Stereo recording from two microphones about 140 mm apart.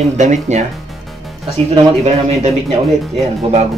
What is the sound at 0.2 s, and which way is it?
Speech, 60° right (ahead or behind).